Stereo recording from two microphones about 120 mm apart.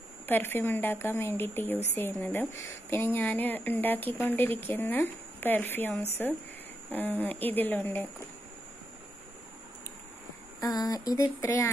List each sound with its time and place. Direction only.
0.3 s speech: 20° left (ahead or behind)
6.9 s speech: 15° left (ahead or behind)
10.6 s speech: 30° left (ahead or behind)